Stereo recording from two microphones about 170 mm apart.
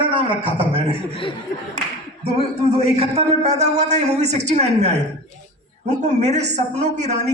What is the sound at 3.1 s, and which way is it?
A man's voice, 40° right (ahead or behind).